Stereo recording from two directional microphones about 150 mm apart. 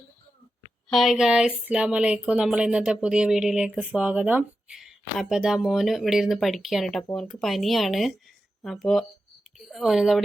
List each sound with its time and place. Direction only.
0.9 s speech: centre (ahead or behind)